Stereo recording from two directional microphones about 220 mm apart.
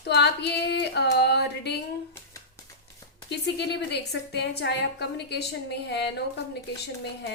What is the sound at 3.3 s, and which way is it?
A woman's voice, 50° left (ahead or behind).